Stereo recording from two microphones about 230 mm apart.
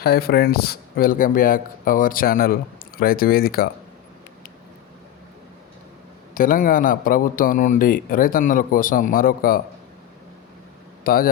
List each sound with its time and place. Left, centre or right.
0.0 s a man's voice: left
6.3 s a man's voice: left
11.0 s speech: left